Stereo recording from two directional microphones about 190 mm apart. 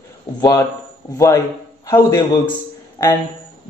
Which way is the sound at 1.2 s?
15° left (ahead or behind).